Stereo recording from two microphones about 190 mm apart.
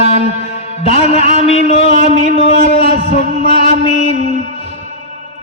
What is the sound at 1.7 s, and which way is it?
A man's voice, 35° left (ahead or behind).